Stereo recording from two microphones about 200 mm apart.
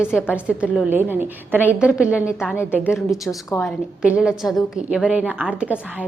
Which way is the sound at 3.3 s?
5° left (ahead or behind).